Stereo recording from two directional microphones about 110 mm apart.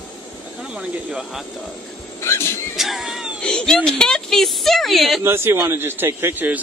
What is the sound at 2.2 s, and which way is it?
Speech, 25° left (ahead or behind).